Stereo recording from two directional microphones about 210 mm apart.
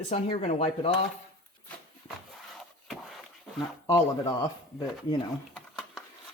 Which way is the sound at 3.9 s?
15° left (ahead or behind).